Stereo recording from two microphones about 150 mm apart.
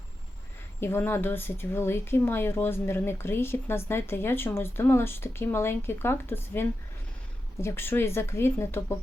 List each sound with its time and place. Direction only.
0.8 s speech: 15° left (ahead or behind)